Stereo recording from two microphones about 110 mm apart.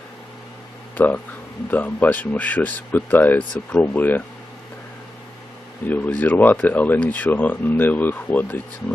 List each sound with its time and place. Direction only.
0.9 s speech: 15° left (ahead or behind)
5.9 s speech: 15° left (ahead or behind)